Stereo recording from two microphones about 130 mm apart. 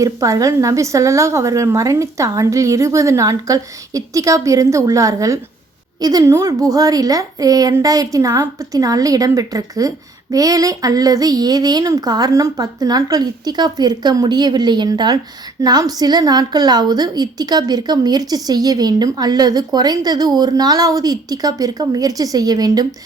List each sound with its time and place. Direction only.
0.0 s a woman's voice: 25° right (ahead or behind)